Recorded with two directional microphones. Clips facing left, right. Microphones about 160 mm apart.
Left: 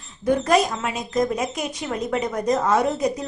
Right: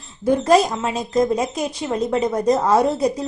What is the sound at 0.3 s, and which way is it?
A woman's voice, 30° right (ahead or behind).